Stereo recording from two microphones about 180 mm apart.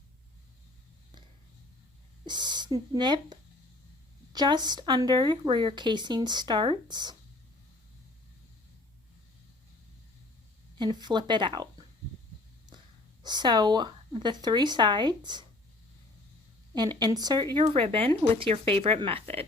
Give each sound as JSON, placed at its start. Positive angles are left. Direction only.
{"t": 2.2, "sound": "speech", "side_deg": -25}
{"t": 10.8, "sound": "speech", "side_deg": -25}
{"t": 13.2, "sound": "speech", "side_deg": -25}
{"t": 16.7, "sound": "speech", "side_deg": -25}